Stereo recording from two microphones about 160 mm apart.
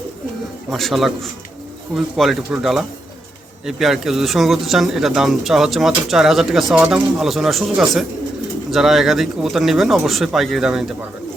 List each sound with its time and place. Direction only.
0.7 s speech: centre (ahead or behind)